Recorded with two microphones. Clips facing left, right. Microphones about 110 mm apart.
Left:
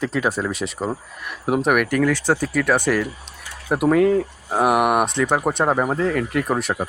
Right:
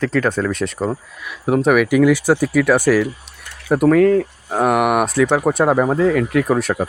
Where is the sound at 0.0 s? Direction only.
5° left (ahead or behind).